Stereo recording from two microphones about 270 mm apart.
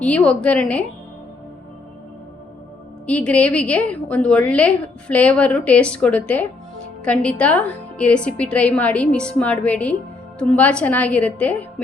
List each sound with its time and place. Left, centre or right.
0.0 s a woman's voice: centre
3.1 s a woman's voice: centre